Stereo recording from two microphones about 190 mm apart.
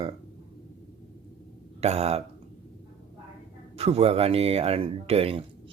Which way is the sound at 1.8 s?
35° right (ahead or behind).